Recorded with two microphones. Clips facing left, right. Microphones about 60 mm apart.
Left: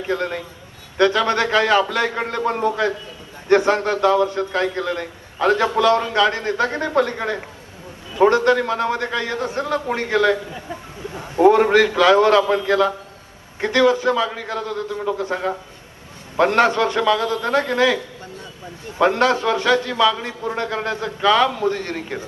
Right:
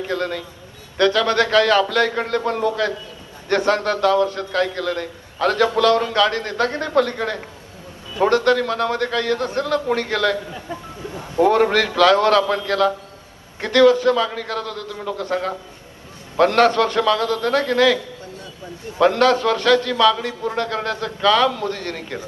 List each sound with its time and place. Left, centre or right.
0.1 s a man's voice: left
11.4 s a man's voice: centre